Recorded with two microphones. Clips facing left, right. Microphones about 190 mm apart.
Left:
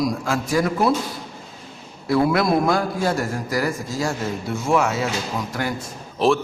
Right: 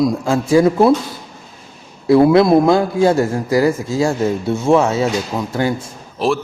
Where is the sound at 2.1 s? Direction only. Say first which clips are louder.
Right 8 dB; 25° right (ahead or behind).